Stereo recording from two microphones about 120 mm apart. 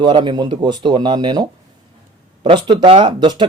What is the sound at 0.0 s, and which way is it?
Speech, 40° right (ahead or behind).